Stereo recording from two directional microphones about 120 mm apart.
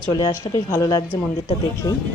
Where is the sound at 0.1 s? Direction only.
35° left (ahead or behind).